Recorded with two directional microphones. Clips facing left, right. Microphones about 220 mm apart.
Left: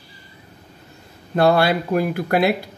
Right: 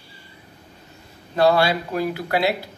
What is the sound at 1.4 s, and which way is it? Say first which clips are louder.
Speech: left 1 dB; 55° left (ahead or behind).